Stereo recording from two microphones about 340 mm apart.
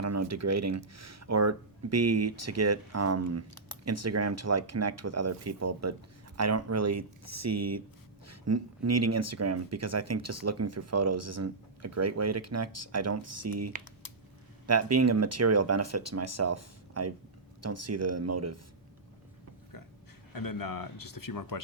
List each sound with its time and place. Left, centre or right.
0.0 s speech: right
20.3 s speech: left